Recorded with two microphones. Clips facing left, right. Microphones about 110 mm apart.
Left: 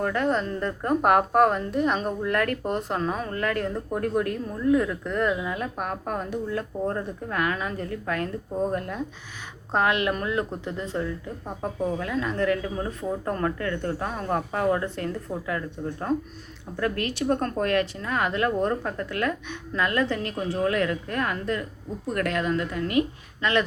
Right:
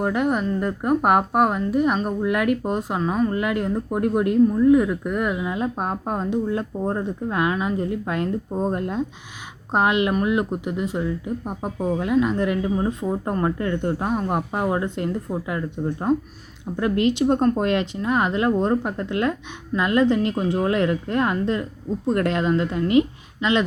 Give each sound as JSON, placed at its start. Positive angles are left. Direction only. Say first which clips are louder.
{"t": 0.0, "sound": "a woman's voice", "louder": "right 3 dB", "side_deg": -15}